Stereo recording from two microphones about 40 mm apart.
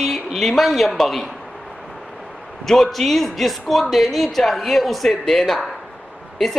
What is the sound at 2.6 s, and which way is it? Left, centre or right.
A woman's voice, centre.